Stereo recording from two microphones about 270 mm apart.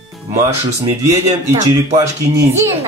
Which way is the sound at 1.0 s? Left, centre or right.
Centre.